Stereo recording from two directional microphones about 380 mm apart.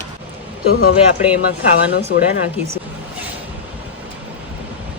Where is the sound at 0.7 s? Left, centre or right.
Left.